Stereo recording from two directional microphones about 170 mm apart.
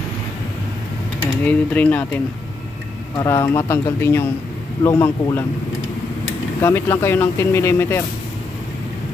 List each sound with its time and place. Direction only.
1.4 s speech: 10° left (ahead or behind)
3.2 s speech: 20° left (ahead or behind)
6.6 s speech: 15° left (ahead or behind)